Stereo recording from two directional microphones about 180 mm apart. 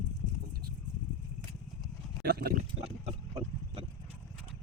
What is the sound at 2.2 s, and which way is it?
Speech, 60° right (ahead or behind).